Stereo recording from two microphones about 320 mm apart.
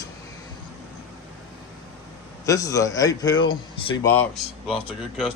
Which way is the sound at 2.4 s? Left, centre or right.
Centre.